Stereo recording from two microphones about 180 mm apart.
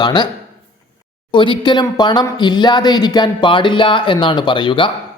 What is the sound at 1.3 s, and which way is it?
Speech, 25° left (ahead or behind).